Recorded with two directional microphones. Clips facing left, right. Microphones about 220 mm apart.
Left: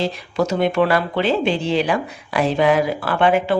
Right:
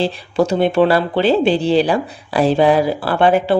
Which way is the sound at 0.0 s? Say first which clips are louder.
Right 4 dB; 30° right (ahead or behind).